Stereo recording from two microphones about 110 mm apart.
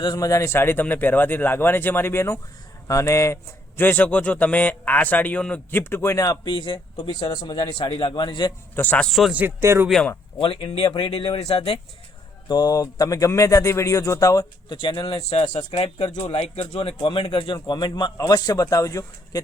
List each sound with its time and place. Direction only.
0.0 s speech: 35° left (ahead or behind)
3.8 s a man's voice: 15° left (ahead or behind)
5.8 s speech: 25° left (ahead or behind); by 8.5 s 40° left (ahead or behind)
8.7 s a man's voice: 15° left (ahead or behind)
9.0 s speech: centre (ahead or behind)
9.6 s speech: 25° right (ahead or behind)
10.3 s speech: 55° left (ahead or behind)
12.5 s speech: 35° left (ahead or behind)
14.8 s speech: 50° left (ahead or behind); by 16.0 s 65° left (ahead or behind)
16.0 s a man's voice: 45° left (ahead or behind)
16.3 s a man's voice: 65° left (ahead or behind); by 19.4 s 30° left (ahead or behind)